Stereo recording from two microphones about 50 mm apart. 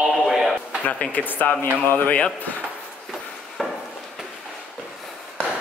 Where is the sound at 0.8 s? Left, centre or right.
Left.